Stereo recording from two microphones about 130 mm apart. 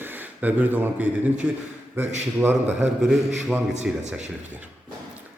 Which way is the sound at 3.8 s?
60° right (ahead or behind).